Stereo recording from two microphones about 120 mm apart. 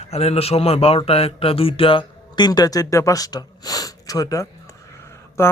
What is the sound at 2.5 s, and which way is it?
Speech, 30° left (ahead or behind).